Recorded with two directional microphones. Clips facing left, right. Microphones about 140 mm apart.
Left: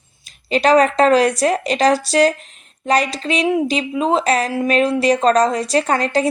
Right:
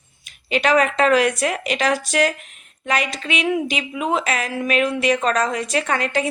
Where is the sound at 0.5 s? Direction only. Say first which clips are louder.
Left 4 dB; 35° left (ahead or behind).